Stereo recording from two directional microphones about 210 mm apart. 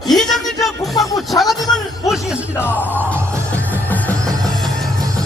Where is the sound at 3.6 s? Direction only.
10° left (ahead or behind).